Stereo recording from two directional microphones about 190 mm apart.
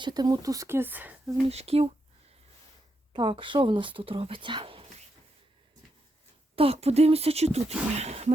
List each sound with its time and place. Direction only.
0.0 s speech: 20° right (ahead or behind)
1.5 s speech: 35° right (ahead or behind)
3.1 s speech: 25° right (ahead or behind)
6.6 s speech: 30° right (ahead or behind)